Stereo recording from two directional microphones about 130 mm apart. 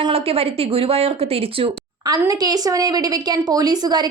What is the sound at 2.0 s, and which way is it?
A woman's voice, 30° right (ahead or behind).